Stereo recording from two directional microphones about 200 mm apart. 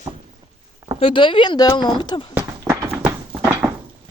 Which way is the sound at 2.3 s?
10° right (ahead or behind).